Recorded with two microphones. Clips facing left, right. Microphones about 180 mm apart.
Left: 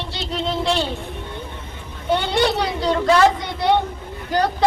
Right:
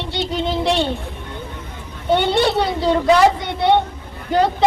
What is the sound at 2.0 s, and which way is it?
Speech, 25° right (ahead or behind).